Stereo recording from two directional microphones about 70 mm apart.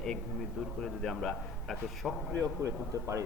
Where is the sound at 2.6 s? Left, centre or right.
Right.